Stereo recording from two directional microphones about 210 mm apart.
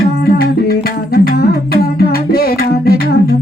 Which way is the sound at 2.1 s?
45° left (ahead or behind).